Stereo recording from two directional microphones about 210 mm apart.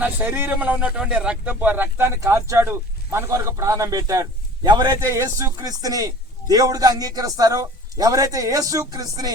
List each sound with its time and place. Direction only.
0.0 s speech: 10° right (ahead or behind)